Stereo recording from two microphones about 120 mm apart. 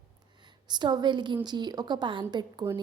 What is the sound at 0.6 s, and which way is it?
A woman's voice, 40° right (ahead or behind).